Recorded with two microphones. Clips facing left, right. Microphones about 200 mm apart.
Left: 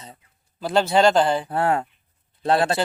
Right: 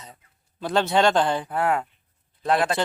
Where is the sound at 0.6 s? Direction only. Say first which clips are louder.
Left 2 dB; centre (ahead or behind).